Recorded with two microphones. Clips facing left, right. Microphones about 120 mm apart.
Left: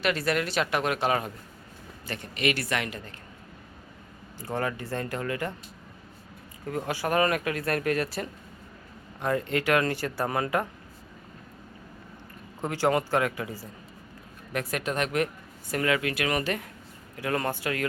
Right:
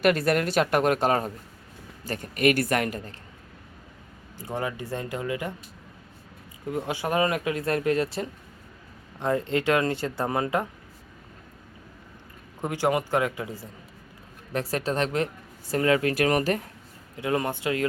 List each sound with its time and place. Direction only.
0.0 s speech: 50° right (ahead or behind)
4.4 s speech: 15° right (ahead or behind)
6.7 s speech: 20° right (ahead or behind)
12.6 s speech: 15° right (ahead or behind); by 16.6 s 35° right (ahead or behind)
17.2 s speech: 20° right (ahead or behind)